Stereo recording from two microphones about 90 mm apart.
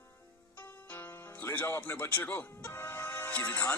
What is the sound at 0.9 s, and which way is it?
Speech, 20° left (ahead or behind).